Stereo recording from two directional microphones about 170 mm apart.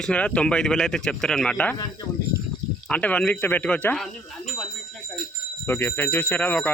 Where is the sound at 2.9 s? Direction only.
10° left (ahead or behind).